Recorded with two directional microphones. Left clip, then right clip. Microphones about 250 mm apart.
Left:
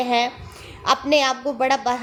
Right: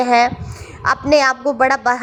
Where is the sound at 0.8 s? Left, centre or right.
Right.